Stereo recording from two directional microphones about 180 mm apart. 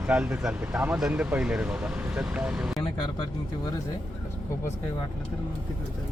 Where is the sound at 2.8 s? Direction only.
25° left (ahead or behind).